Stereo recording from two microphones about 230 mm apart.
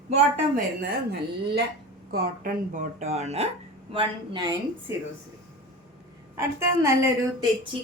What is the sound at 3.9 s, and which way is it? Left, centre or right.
A woman's voice, centre.